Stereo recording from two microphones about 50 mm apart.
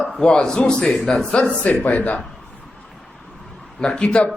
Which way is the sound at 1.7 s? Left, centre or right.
Left.